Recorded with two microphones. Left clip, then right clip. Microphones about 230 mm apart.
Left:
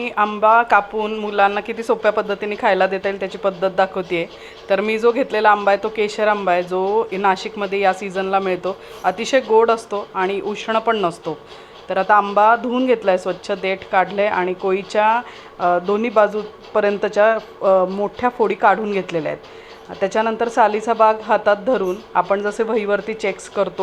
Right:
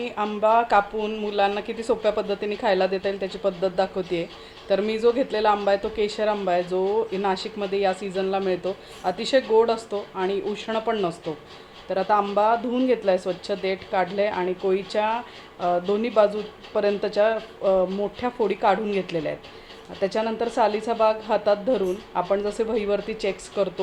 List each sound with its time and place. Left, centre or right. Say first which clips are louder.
0.0 s speech: left 7 dB; centre